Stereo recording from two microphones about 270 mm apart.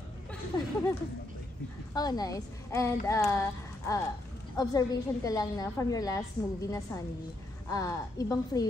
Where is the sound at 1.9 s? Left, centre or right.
Centre.